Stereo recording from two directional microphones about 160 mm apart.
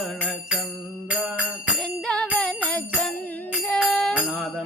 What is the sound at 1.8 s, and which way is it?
Music, 5° left (ahead or behind).